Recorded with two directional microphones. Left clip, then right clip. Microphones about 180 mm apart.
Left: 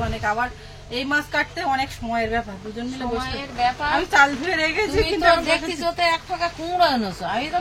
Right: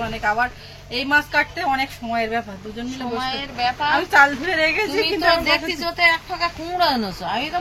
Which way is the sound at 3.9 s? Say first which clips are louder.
Right 3 dB; centre (ahead or behind).